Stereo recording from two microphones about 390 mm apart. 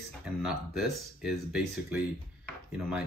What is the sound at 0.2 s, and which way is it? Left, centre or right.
Speech, centre.